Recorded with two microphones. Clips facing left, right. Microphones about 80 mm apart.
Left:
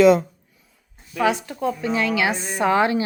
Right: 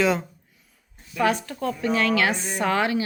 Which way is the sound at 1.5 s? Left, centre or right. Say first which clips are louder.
Left 1 dB; centre.